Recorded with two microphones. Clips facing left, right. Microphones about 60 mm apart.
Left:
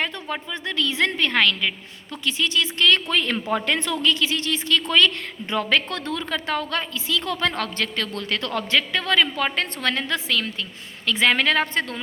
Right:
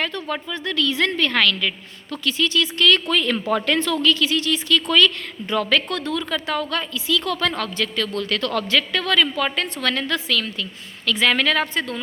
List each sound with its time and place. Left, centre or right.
0.0 s a woman's voice: left
7.5 s a woman's voice: left